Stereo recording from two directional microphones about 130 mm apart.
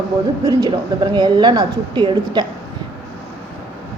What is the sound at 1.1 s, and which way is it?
A woman's voice, 35° right (ahead or behind).